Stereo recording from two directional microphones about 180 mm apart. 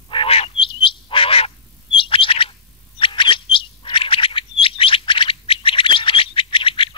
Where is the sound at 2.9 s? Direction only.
30° left (ahead or behind).